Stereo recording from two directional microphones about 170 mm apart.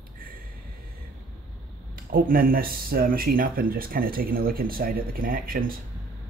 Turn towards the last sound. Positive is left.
turn(degrees=-60)  # may be behind; listen again after turning